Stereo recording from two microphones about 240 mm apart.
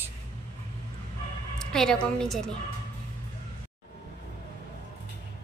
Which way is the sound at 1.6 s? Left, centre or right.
Centre.